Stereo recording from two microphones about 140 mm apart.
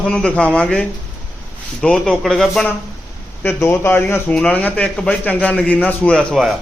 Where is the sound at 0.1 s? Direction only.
5° left (ahead or behind).